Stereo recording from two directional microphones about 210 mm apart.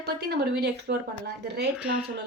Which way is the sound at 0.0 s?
50° right (ahead or behind).